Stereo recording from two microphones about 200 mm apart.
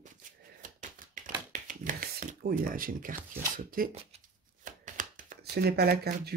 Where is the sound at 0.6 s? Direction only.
40° right (ahead or behind).